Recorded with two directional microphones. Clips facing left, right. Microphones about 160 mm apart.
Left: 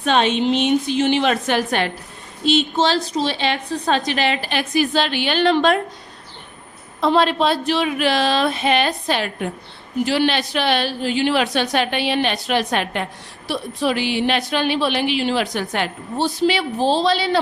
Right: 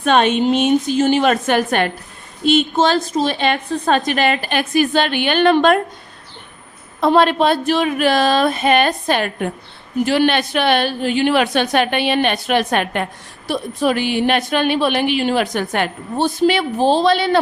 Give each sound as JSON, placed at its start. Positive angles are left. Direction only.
{"t": 0.0, "sound": "a woman's voice", "side_deg": -55}
{"t": 7.0, "sound": "a woman's voice", "side_deg": -55}